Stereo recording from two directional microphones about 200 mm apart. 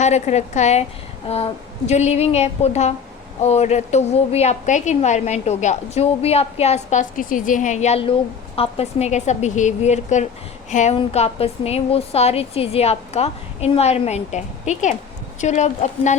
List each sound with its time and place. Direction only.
0.0 s a woman's voice: 35° left (ahead or behind)
1.3 s a sound: 30° left (ahead or behind)
1.9 s a woman's voice: 35° left (ahead or behind)